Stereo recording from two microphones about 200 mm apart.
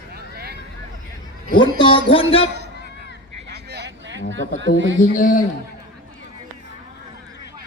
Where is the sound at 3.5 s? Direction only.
55° right (ahead or behind).